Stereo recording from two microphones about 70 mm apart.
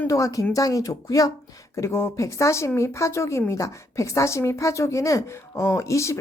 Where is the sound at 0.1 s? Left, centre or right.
Left.